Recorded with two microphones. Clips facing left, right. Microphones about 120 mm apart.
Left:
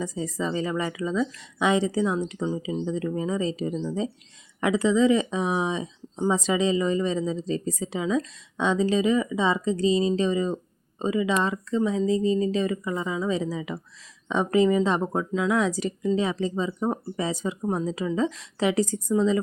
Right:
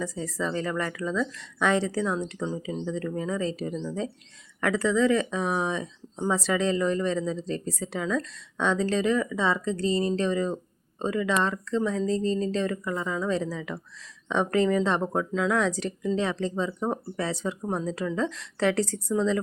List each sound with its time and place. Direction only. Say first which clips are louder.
0.0 s speech: left 2 dB; 15° left (ahead or behind)